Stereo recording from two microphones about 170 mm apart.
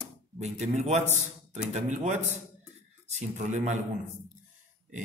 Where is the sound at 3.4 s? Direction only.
45° right (ahead or behind).